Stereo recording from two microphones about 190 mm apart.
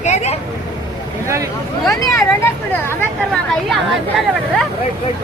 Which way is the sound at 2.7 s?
10° left (ahead or behind).